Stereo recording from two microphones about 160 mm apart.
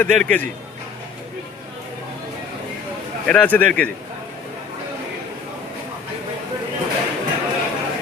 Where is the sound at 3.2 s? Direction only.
10° left (ahead or behind).